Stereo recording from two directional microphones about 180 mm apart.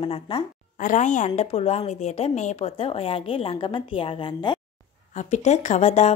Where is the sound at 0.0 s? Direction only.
30° left (ahead or behind).